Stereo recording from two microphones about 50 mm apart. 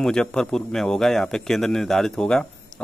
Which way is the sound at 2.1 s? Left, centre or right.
Centre.